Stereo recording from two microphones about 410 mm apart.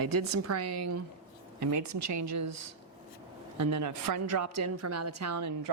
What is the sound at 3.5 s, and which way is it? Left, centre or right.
A woman's voice, right.